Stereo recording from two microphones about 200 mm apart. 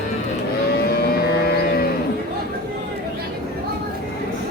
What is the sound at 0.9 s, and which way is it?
Music, 50° left (ahead or behind).